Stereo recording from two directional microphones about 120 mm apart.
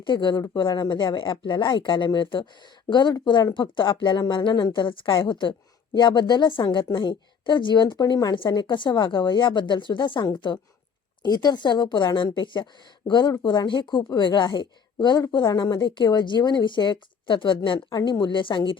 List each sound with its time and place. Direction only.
0.0 s speech: 40° left (ahead or behind)